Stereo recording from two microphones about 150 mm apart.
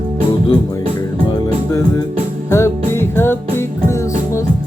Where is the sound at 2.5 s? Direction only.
15° left (ahead or behind).